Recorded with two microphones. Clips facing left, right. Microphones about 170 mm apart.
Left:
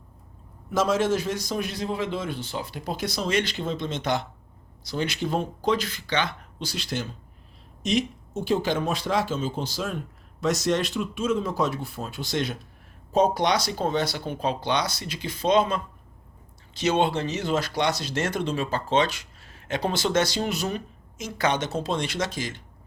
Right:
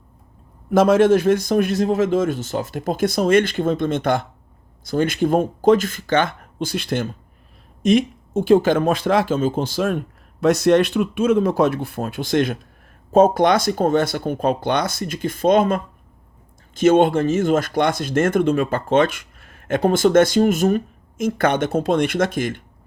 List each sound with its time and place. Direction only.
0.7 s speech: 55° right (ahead or behind)